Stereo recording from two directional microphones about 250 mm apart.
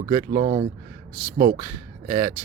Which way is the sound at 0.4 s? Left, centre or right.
Right.